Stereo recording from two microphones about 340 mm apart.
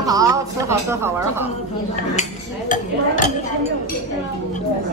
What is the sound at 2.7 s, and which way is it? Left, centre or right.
Speech, left.